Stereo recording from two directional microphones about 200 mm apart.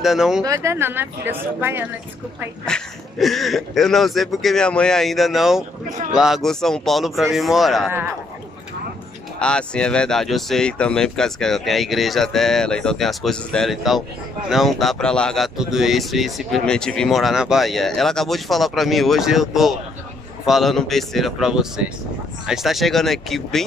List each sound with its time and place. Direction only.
0.0 s speech: centre (ahead or behind)
0.4 s speech: 15° right (ahead or behind)
2.6 s speech: centre (ahead or behind)
5.9 s a man's voice: 35° right (ahead or behind)
6.1 s speech: centre (ahead or behind)
9.4 s speech: 5° left (ahead or behind)